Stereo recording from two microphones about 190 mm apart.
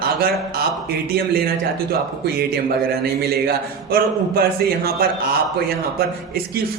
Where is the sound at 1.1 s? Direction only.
55° right (ahead or behind).